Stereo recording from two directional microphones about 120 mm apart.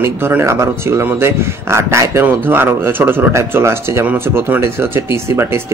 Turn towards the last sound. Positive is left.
turn(degrees=-20)  # may be behind; listen again after turning